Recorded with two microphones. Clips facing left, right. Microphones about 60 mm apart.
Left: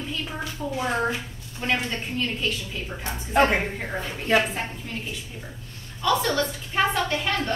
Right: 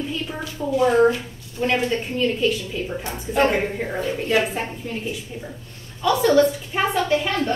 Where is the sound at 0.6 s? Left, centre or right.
Centre.